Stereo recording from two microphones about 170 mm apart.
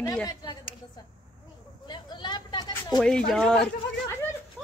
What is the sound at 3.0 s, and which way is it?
Speech, 5° left (ahead or behind).